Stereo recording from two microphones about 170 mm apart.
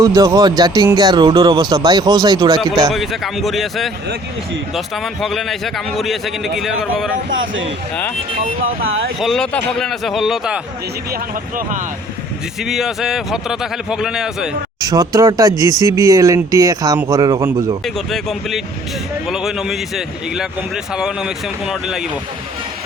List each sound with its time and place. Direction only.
0.0 s speech: 20° right (ahead or behind)
2.9 s speech: centre (ahead or behind)
8.6 s speech: 60° right (ahead or behind)
9.1 s speech: centre (ahead or behind)
11.1 s speech: 55° right (ahead or behind)
12.5 s speech: centre (ahead or behind)
14.8 s speech: 20° right (ahead or behind)
17.8 s speech: centre (ahead or behind)